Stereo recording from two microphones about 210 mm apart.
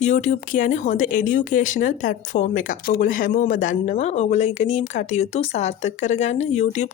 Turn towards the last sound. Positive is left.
turn(degrees=30)  # may be behind; listen again after turning